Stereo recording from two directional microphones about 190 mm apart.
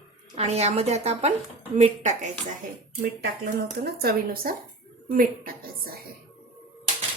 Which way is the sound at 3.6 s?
55° right (ahead or behind).